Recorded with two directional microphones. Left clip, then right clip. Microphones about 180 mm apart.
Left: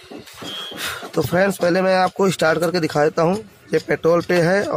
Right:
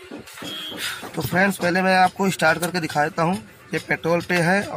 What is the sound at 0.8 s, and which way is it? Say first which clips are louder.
Speech: left 9 dB; 60° left (ahead or behind).